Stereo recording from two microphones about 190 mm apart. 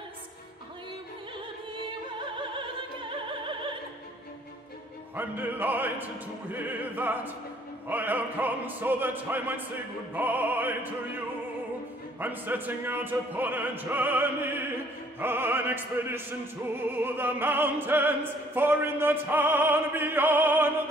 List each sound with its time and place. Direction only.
2.0 s opera: 25° right (ahead or behind)
5.1 s music: 10° right (ahead or behind)